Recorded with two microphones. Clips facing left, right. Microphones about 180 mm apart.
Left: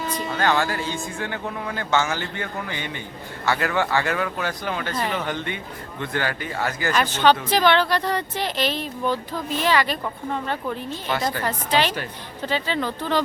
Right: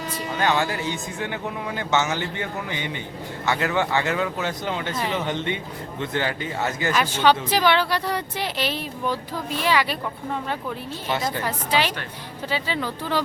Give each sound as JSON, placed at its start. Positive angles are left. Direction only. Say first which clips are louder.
{"t": 0.3, "sound": "speech", "louder": "even", "side_deg": -15}
{"t": 6.9, "sound": "a woman's voice", "louder": "left 1 dB", "side_deg": -10}